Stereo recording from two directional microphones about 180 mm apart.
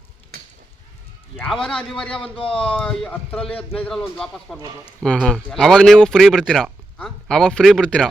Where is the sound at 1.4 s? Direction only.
5° left (ahead or behind).